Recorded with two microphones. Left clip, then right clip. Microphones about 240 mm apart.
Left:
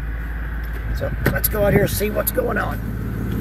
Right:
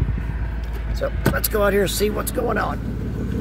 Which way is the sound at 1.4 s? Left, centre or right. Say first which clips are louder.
Left 1 dB; centre.